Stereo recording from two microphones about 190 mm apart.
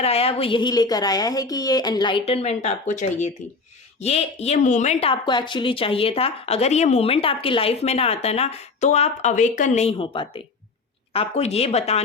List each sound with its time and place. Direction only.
0.0 s a woman's voice: 30° left (ahead or behind)